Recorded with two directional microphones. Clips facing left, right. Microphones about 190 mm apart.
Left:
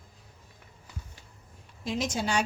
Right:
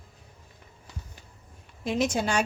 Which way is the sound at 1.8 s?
55° right (ahead or behind).